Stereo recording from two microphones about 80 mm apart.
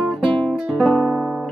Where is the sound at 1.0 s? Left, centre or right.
Centre.